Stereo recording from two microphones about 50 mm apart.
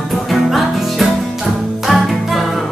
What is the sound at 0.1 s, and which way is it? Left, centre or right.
Music, centre.